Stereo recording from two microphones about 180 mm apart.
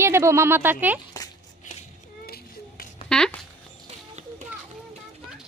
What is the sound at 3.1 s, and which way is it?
Zipper, 5° left (ahead or behind).